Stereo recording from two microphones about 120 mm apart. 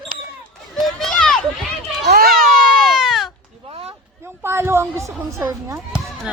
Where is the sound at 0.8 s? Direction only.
Centre (ahead or behind).